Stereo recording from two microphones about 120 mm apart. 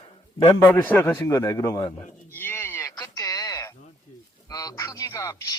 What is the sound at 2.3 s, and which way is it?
Sheep, 20° left (ahead or behind).